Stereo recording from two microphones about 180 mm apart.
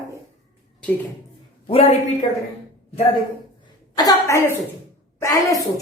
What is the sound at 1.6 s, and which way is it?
Speech, 35° left (ahead or behind).